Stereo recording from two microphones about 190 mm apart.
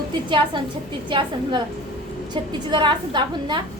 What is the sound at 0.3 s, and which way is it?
A woman's voice, 25° right (ahead or behind).